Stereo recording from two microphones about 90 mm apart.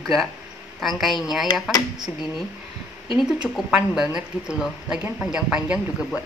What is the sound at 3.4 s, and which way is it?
A woman's voice, 5° right (ahead or behind).